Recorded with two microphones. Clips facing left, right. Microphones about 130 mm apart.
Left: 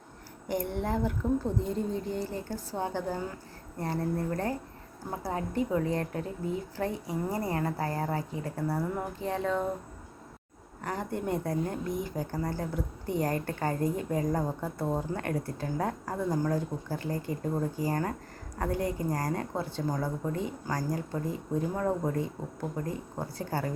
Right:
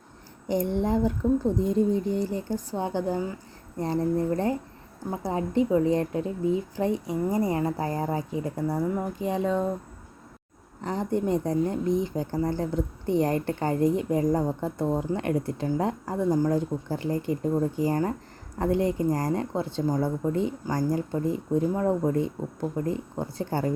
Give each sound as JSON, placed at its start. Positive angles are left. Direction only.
{"t": 0.4, "sound": "speech", "side_deg": -20}
{"t": 10.8, "sound": "speech", "side_deg": -20}